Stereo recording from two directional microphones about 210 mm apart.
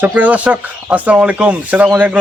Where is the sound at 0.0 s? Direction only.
10° right (ahead or behind).